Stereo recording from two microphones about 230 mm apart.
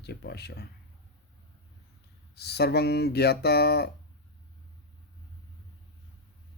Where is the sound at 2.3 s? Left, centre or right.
Left.